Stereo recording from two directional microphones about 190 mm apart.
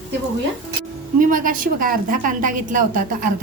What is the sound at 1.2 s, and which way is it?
A woman's voice, 45° right (ahead or behind).